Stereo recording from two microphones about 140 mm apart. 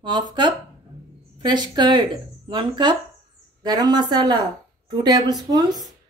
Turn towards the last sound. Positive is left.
turn(degrees=-30)  # may be behind; listen again after turning